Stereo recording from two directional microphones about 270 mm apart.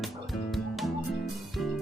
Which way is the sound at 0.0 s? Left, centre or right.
Centre.